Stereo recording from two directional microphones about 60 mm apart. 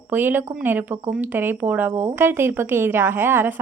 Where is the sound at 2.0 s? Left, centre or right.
Right.